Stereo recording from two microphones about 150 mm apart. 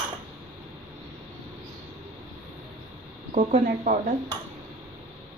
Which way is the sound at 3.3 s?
50° right (ahead or behind).